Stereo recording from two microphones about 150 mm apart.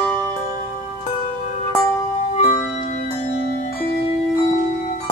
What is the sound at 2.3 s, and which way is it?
Music, 45° left (ahead or behind).